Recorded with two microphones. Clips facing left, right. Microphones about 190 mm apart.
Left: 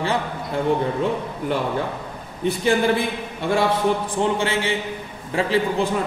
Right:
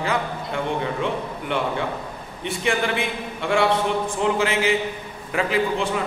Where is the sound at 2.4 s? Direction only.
35° left (ahead or behind).